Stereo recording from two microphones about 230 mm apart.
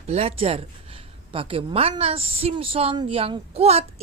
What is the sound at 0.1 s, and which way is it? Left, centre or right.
A woman's voice, right.